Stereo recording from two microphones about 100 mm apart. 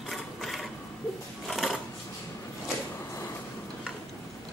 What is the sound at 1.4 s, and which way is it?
Sewing machine, centre (ahead or behind).